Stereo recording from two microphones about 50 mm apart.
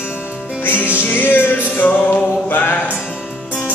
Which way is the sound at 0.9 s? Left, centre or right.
Left.